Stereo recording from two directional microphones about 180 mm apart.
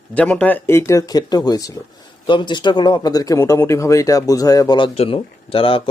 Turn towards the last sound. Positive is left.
turn(degrees=30)  # may be behind; listen again after turning